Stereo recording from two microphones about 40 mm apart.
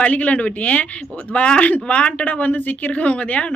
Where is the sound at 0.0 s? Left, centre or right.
Left.